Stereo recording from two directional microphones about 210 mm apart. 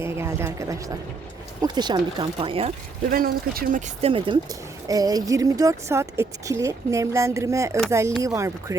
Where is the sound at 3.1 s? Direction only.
45° right (ahead or behind).